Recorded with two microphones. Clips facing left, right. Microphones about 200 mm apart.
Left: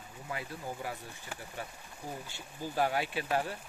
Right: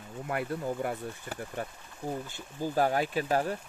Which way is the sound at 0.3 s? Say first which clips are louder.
Right 8 dB; 60° right (ahead or behind).